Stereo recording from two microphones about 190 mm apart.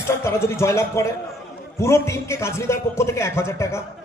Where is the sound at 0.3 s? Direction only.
15° left (ahead or behind).